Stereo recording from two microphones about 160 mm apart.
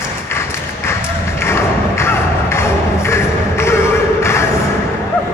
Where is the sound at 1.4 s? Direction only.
15° left (ahead or behind).